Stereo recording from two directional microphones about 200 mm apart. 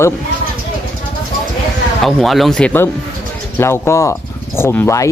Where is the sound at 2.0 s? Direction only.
Centre (ahead or behind).